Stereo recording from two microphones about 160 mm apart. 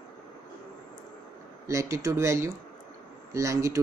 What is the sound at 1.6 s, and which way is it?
Speech, 20° right (ahead or behind).